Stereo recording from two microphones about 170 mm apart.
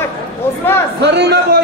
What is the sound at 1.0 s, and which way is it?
Speech, 75° right (ahead or behind).